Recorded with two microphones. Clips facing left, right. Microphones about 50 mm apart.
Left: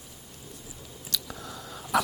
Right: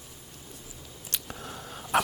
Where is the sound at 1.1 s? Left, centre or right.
Right.